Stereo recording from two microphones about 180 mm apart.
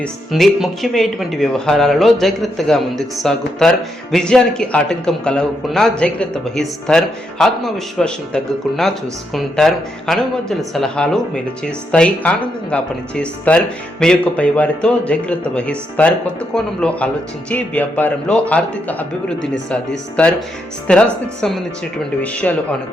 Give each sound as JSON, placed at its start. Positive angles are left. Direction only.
{"t": 0.0, "sound": "a man's voice", "side_deg": 0}
{"t": 21.4, "sound": "a man's voice", "side_deg": 5}